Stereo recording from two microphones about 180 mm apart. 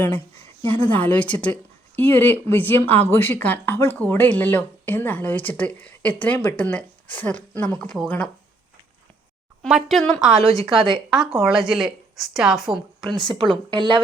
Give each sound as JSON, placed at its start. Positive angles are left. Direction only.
{"t": 0.9, "sound": "speech", "side_deg": 10}
{"t": 9.6, "sound": "a woman's voice", "side_deg": 0}
{"t": 10.4, "sound": "a woman's voice", "side_deg": 20}
{"t": 11.1, "sound": "a woman's voice", "side_deg": 0}
{"t": 13.5, "sound": "a woman's voice", "side_deg": -30}